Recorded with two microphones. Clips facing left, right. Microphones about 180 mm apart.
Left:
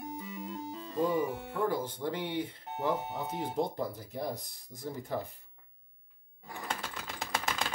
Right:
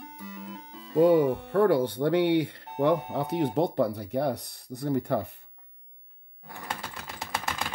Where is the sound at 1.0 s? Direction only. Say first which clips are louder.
Right 10 dB; 70° right (ahead or behind).